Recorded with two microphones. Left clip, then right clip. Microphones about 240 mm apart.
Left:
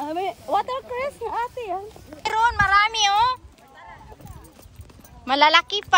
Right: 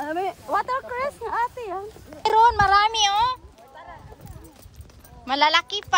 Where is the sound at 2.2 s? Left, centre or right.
Centre.